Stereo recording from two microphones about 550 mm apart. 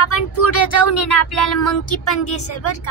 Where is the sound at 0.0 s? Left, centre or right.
Left.